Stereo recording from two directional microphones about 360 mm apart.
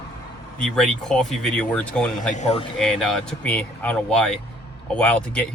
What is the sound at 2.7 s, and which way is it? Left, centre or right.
Speech, centre.